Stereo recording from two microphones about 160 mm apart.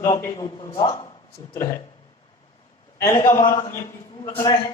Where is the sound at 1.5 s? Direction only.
20° left (ahead or behind).